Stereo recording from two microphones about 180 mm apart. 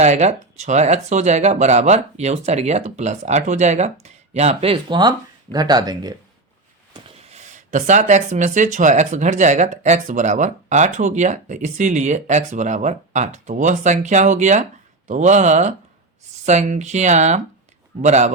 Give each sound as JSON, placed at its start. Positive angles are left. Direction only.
{"t": 0.0, "sound": "speech", "side_deg": -40}
{"t": 6.9, "sound": "speech", "side_deg": -35}